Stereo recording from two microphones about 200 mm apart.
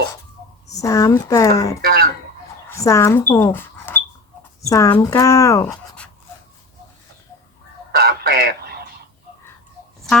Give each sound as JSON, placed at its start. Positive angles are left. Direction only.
{"t": 0.7, "sound": "speech", "side_deg": 15}
{"t": 1.8, "sound": "speech", "side_deg": -50}
{"t": 2.6, "sound": "speech", "side_deg": 15}
{"t": 7.9, "sound": "radio", "side_deg": -50}